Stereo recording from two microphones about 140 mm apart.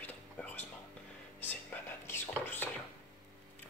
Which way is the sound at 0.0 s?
15° left (ahead or behind).